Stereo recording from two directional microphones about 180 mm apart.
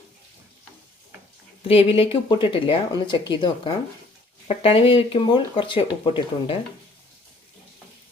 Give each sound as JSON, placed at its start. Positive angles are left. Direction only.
{"t": 1.6, "sound": "speech", "side_deg": 30}